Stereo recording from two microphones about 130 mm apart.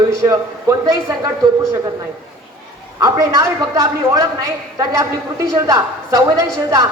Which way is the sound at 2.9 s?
25° right (ahead or behind).